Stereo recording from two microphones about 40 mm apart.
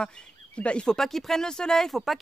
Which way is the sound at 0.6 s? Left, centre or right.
Left.